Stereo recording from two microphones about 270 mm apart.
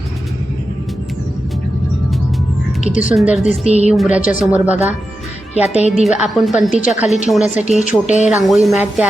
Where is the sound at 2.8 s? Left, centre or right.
Left.